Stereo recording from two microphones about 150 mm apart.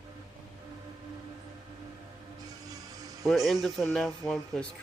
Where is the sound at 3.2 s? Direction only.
Centre (ahead or behind).